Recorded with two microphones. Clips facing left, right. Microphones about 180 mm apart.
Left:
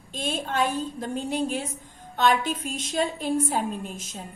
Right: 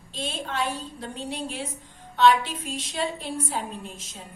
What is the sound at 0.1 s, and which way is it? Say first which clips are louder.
A woman's voice: left 3 dB; 50° left (ahead or behind).